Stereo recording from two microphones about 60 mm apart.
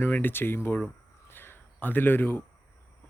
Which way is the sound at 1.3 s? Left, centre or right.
Left.